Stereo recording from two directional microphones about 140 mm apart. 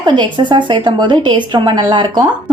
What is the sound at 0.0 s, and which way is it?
A woman's voice, 35° right (ahead or behind).